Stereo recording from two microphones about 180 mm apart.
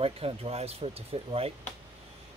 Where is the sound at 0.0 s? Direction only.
30° right (ahead or behind).